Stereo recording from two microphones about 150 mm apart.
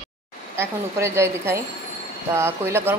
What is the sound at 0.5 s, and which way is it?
Speech, 15° right (ahead or behind).